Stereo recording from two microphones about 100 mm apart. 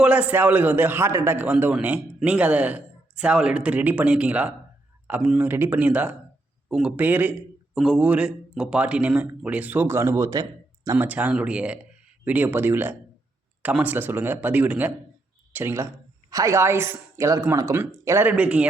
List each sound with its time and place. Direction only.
0.0 s a man's voice: 10° right (ahead or behind); by 10.4 s 35° right (ahead or behind)
10.9 s a man's voice: 15° right (ahead or behind)